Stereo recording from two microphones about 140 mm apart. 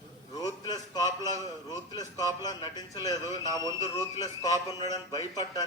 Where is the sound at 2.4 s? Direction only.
30° left (ahead or behind).